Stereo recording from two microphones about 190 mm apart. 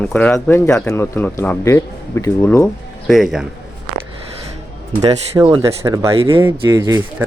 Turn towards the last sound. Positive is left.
turn(degrees=-15)  # may be behind; listen again after turning